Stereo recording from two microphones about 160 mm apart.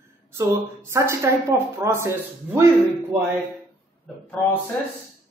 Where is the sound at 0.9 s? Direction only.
15° right (ahead or behind).